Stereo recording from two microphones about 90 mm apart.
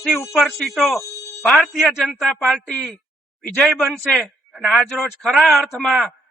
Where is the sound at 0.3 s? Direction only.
5° left (ahead or behind).